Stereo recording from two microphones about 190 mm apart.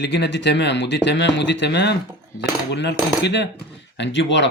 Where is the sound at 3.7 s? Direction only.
65° left (ahead or behind).